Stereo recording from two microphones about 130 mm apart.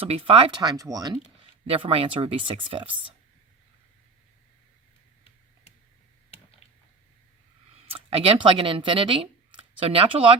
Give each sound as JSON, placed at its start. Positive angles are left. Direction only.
{"t": 0.0, "sound": "speech", "side_deg": -50}
{"t": 1.6, "sound": "speech", "side_deg": -45}
{"t": 8.1, "sound": "speech", "side_deg": -40}